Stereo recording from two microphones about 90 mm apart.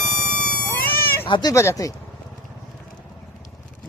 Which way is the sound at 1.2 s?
65° left (ahead or behind).